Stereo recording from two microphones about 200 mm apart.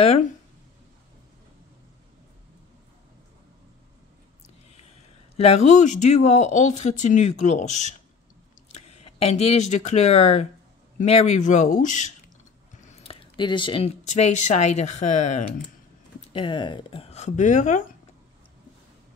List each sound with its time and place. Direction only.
5.4 s speech: 35° left (ahead or behind)
13.0 s speech: 25° left (ahead or behind)
16.3 s speech: 25° left (ahead or behind); by 17.8 s 40° left (ahead or behind)